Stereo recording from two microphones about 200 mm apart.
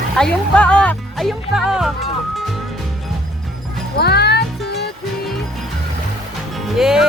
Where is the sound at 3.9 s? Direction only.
55° left (ahead or behind).